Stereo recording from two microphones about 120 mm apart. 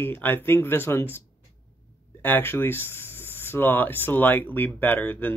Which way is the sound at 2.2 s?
15° left (ahead or behind).